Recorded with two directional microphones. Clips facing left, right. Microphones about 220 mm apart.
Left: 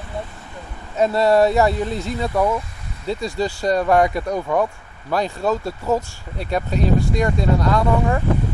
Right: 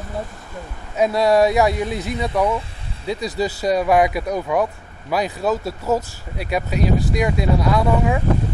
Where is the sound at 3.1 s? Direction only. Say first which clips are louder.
Even; 15° right (ahead or behind).